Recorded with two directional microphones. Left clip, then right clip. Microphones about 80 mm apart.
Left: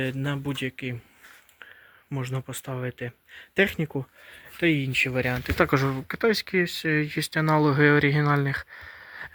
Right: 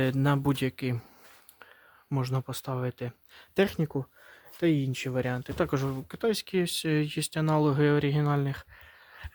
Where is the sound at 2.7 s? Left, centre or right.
Right.